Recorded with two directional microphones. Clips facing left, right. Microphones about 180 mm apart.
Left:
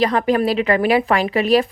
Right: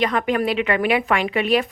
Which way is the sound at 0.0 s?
35° left (ahead or behind).